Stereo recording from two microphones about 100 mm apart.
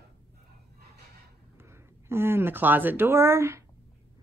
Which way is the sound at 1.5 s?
25° right (ahead or behind).